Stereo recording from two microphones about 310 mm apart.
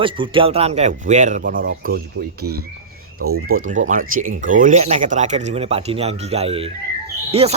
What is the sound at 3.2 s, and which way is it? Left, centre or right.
Speech, right.